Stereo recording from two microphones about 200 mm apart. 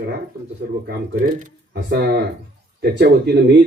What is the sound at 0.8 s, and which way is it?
Speech, 50° right (ahead or behind).